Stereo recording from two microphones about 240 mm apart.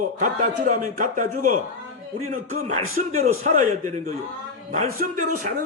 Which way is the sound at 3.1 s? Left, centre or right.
Right.